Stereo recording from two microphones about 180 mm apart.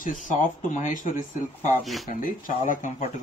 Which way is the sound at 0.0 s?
45° left (ahead or behind).